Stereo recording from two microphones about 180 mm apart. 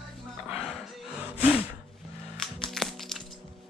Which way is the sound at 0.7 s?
Centre (ahead or behind).